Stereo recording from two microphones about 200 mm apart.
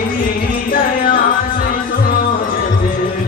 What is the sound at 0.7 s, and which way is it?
Music, 45° left (ahead or behind).